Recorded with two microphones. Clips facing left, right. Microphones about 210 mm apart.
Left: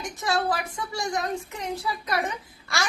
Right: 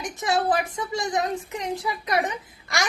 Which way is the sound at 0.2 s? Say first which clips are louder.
Right 3 dB; 20° right (ahead or behind).